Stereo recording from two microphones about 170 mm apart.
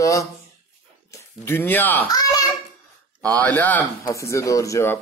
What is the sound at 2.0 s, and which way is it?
Speech, 20° left (ahead or behind).